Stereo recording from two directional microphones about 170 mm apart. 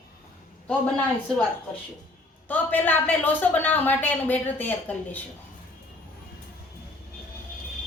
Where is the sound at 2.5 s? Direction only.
10° left (ahead or behind).